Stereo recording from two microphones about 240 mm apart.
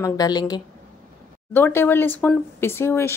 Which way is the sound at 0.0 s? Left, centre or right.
Centre.